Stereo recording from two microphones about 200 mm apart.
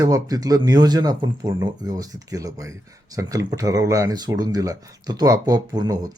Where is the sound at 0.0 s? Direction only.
20° right (ahead or behind).